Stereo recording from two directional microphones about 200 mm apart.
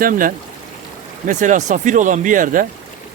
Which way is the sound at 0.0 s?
45° right (ahead or behind).